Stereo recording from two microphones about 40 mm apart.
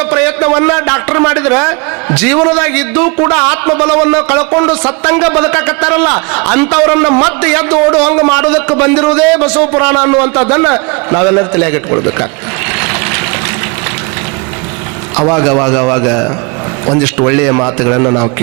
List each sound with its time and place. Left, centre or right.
0.0 s a sound: centre
1.5 s a woman's voice: centre
2.1 s a man's voice: centre
2.6 s a man's voice: centre
12.8 s vehicle: centre
15.2 s a man's voice: centre
17.3 s a man's voice: centre